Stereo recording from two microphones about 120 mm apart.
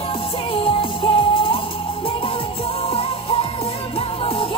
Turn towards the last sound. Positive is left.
turn(degrees=50)  # may be behind; listen again after turning